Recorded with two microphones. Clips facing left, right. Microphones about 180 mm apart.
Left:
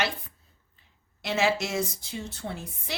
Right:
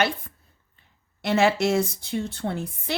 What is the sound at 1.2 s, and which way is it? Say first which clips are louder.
A woman's voice: right 5 dB; 60° right (ahead or behind).